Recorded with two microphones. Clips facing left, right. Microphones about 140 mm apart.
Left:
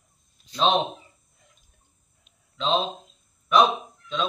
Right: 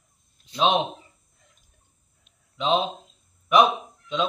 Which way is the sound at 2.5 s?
10° right (ahead or behind).